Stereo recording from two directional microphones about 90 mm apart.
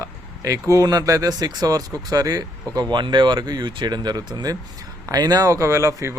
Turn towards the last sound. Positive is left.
turn(degrees=-35)  # may be behind; listen again after turning